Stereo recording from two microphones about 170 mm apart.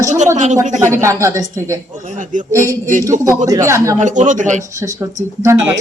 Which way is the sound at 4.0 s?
45° right (ahead or behind).